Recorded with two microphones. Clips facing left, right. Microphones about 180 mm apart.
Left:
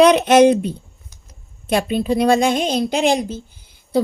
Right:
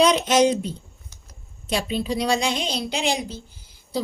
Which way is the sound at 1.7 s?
55° left (ahead or behind).